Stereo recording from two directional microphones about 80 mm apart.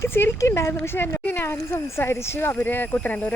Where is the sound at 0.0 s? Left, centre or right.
Left.